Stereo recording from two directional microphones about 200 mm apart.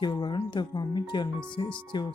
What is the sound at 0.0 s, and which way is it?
Speech, 20° left (ahead or behind).